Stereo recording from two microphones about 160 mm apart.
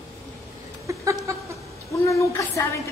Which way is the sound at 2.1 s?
20° left (ahead or behind).